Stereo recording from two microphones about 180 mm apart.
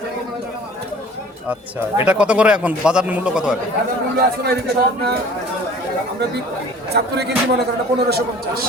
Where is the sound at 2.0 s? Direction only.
5° right (ahead or behind).